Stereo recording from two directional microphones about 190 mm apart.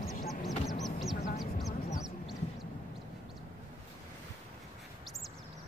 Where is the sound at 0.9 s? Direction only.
Centre (ahead or behind).